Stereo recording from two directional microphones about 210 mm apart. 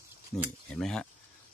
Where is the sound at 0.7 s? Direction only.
5° left (ahead or behind).